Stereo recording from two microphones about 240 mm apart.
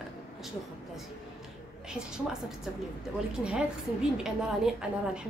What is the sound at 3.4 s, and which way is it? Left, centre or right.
A woman's voice, centre.